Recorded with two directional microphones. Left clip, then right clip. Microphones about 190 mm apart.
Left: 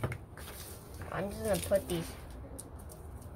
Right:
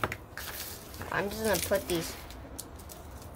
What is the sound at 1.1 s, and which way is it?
Speech, 15° right (ahead or behind).